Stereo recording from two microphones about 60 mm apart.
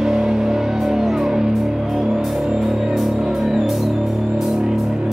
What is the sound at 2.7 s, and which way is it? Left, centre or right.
Music, centre.